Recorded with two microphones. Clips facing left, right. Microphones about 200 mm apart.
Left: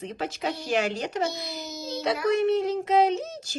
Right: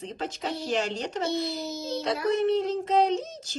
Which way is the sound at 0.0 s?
10° left (ahead or behind).